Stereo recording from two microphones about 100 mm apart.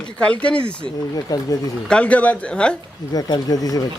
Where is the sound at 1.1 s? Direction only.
40° left (ahead or behind).